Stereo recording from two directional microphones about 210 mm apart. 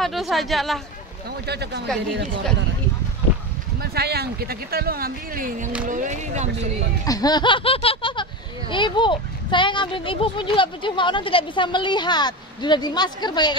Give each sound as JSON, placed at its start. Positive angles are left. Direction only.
{"t": 0.0, "sound": "speech", "side_deg": 0}
{"t": 1.5, "sound": "speech", "side_deg": -50}
{"t": 3.8, "sound": "speech", "side_deg": -50}
{"t": 7.1, "sound": "speech", "side_deg": 20}